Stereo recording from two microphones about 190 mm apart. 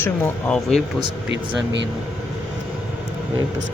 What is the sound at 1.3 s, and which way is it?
Speech, 70° right (ahead or behind).